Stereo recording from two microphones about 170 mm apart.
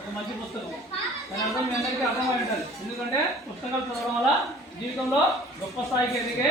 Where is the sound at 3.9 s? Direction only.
Centre (ahead or behind).